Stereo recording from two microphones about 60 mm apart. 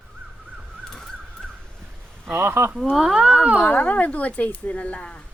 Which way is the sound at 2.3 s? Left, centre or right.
Right.